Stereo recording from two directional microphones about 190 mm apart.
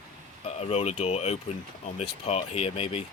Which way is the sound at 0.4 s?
35° left (ahead or behind).